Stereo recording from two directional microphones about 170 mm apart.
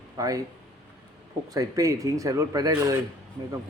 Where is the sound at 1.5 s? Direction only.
20° right (ahead or behind).